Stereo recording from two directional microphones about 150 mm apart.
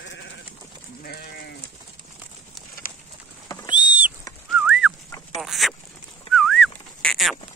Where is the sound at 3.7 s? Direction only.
10° right (ahead or behind).